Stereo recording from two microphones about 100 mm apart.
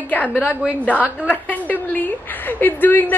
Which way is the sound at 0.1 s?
20° left (ahead or behind).